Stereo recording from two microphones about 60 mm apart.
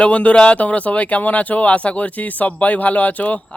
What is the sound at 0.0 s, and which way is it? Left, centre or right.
Speech, left.